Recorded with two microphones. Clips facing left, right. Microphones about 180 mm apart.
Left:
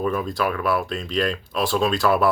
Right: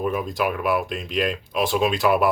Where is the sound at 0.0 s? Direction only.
10° right (ahead or behind).